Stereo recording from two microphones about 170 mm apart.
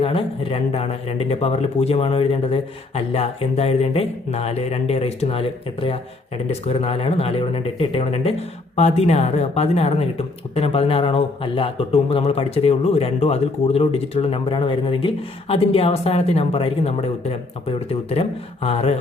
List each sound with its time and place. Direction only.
0.0 s speech: 35° left (ahead or behind)